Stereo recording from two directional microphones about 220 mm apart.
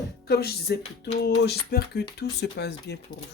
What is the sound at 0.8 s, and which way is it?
Music, 25° left (ahead or behind).